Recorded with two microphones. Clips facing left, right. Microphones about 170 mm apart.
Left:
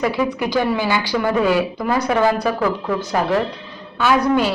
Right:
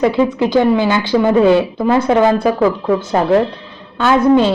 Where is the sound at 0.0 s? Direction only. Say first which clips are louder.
Right 6 dB; 25° right (ahead or behind).